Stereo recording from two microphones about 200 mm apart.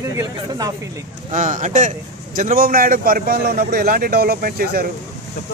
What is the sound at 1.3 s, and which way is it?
A man's voice, 40° right (ahead or behind).